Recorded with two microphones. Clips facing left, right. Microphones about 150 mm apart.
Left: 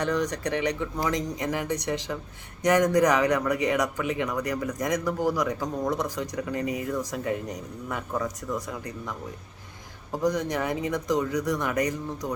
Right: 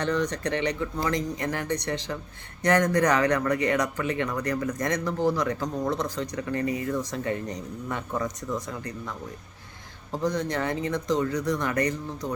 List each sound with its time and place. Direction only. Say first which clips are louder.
0.0 s speech: even; 15° left (ahead or behind)